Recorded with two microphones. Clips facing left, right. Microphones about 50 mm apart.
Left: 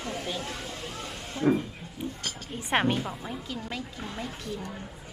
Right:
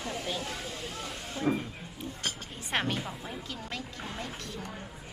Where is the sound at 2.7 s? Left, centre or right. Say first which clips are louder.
Left 6 dB; centre.